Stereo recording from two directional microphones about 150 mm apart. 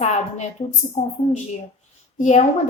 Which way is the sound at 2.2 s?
55° left (ahead or behind).